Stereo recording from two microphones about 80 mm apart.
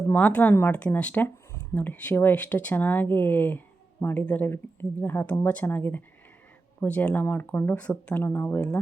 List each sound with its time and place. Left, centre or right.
0.1 s speech: centre